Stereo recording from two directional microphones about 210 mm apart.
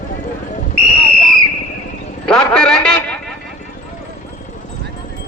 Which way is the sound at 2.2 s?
5° left (ahead or behind).